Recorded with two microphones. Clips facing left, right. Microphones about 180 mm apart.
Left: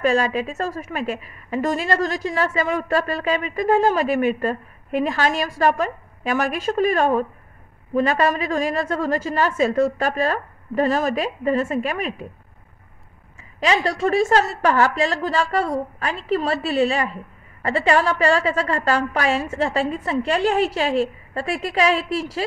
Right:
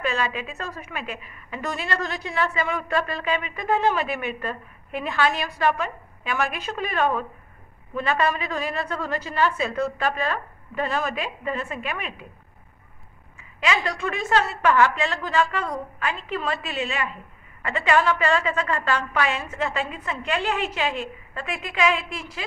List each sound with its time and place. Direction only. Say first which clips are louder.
0.0 s a woman's voice: left 7 dB; 40° left (ahead or behind)
13.4 s a woman's voice: left 5 dB; 35° left (ahead or behind)